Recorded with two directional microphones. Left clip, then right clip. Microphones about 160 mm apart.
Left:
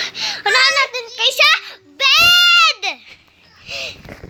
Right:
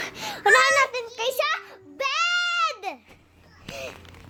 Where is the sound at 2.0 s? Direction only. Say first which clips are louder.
Left 13 dB; centre (ahead or behind).